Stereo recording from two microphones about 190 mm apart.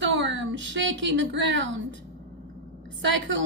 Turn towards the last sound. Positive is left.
turn(degrees=-80)